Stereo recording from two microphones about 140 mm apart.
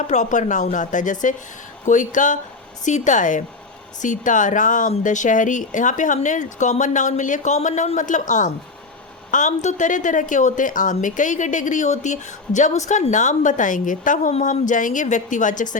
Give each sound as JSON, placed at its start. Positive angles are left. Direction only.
{"t": 0.1, "sound": "a woman's voice", "side_deg": 60}